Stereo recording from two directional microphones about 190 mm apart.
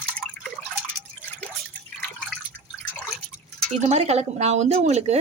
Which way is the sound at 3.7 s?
35° right (ahead or behind).